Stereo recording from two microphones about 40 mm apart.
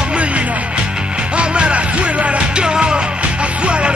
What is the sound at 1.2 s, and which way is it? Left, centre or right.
Music, right.